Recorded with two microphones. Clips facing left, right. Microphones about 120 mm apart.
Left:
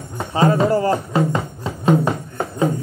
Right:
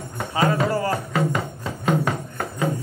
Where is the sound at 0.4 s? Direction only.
30° left (ahead or behind).